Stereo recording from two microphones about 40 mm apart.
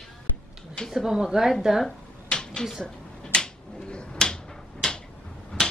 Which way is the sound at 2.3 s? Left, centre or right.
Left.